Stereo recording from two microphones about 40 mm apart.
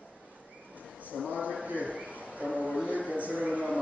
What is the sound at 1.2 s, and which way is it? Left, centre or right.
Speech, right.